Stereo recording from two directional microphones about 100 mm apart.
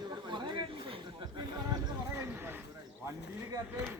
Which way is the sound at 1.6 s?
40° right (ahead or behind).